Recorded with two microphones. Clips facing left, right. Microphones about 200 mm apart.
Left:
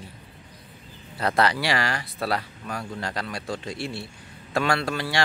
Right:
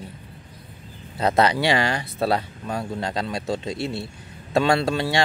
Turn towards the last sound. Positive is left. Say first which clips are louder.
# right 5 dB
turn(degrees=-25)  # may be behind; listen again after turning